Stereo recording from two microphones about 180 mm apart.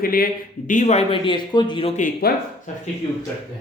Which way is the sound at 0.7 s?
40° left (ahead or behind).